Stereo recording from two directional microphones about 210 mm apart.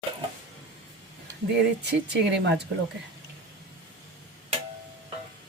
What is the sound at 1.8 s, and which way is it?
Speech, 55° right (ahead or behind).